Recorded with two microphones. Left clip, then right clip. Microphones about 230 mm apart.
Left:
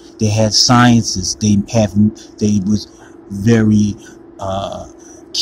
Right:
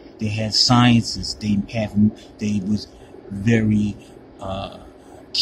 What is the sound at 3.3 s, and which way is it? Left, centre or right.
Speech, centre.